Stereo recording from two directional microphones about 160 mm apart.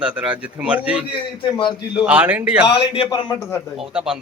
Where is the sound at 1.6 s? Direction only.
30° left (ahead or behind).